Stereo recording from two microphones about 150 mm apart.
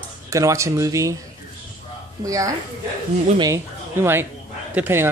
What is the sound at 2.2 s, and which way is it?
Speech, 20° right (ahead or behind).